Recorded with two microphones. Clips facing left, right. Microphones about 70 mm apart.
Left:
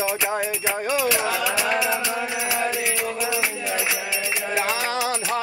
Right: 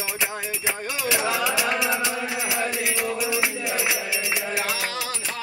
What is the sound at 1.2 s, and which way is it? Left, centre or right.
Music, centre.